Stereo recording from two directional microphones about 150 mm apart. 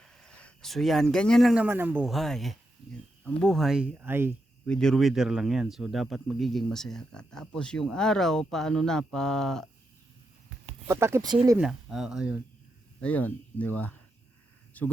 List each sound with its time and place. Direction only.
0.0 s speech: 5° left (ahead or behind); by 2.0 s 10° right (ahead or behind)
2.0 s speech: centre (ahead or behind); by 4.4 s 15° right (ahead or behind)
4.6 s speech: 5° left (ahead or behind)
10.8 s speech: 15° right (ahead or behind)
11.5 s speech: 5° right (ahead or behind)
13.0 s speech: 10° left (ahead or behind)